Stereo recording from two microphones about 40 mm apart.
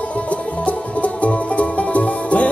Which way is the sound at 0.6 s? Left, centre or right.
Left.